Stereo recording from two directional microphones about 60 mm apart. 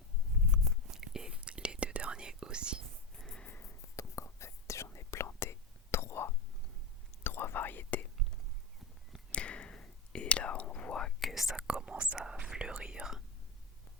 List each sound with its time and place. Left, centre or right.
0.5 s whispering: centre
3.2 s a sound: centre
3.8 s whispering: left
9.3 s whispering: centre
11.2 s whispering: centre
11.7 s whispering: centre